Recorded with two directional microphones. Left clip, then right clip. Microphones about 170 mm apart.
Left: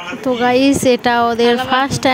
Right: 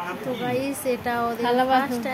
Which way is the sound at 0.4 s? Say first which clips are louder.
Left 16 dB; 55° left (ahead or behind).